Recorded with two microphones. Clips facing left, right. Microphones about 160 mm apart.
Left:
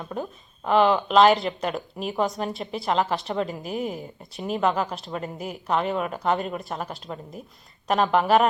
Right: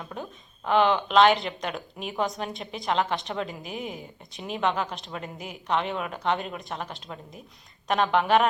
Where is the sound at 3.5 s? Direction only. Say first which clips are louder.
Left 6 dB; 40° left (ahead or behind).